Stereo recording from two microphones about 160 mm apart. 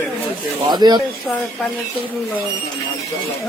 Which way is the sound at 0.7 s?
25° right (ahead or behind).